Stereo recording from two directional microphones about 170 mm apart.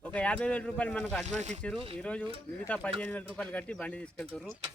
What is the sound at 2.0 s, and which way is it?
Speech, 5° left (ahead or behind).